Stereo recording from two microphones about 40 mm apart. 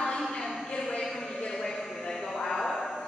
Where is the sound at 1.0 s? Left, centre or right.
Centre.